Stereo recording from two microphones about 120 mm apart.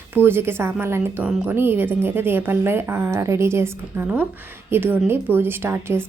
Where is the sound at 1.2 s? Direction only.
10° right (ahead or behind).